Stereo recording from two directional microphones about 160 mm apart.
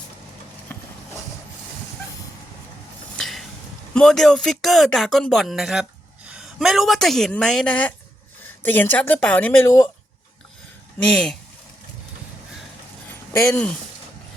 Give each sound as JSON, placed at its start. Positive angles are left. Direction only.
{"t": 3.2, "sound": "a sound", "side_deg": 0}
{"t": 3.9, "sound": "a woman's voice", "side_deg": 0}
{"t": 11.1, "sound": "speech", "side_deg": 5}
{"t": 13.5, "sound": "speech", "side_deg": 5}